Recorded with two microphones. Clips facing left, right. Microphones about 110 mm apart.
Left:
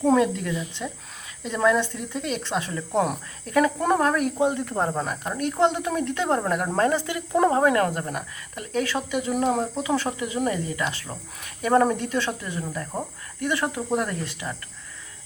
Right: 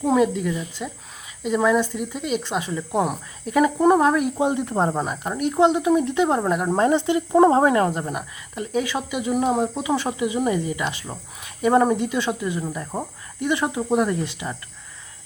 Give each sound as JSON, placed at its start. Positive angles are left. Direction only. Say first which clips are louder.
{"t": 0.0, "sound": "speech", "louder": "right 1 dB", "side_deg": -5}